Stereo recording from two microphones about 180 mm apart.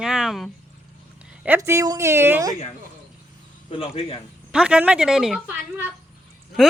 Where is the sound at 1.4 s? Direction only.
15° right (ahead or behind).